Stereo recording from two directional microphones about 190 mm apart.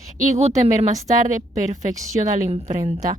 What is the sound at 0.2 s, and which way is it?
A woman's voice, 40° right (ahead or behind).